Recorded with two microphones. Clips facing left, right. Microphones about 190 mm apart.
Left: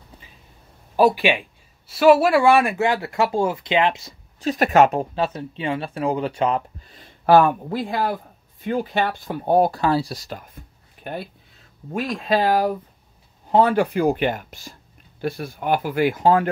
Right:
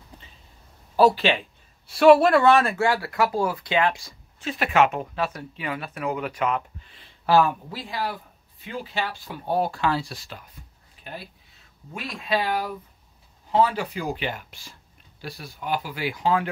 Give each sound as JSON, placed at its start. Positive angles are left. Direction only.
{"t": 0.9, "sound": "speech", "side_deg": 15}
{"t": 4.4, "sound": "speech", "side_deg": 40}
{"t": 11.9, "sound": "speech", "side_deg": 45}
{"t": 13.5, "sound": "speech", "side_deg": 55}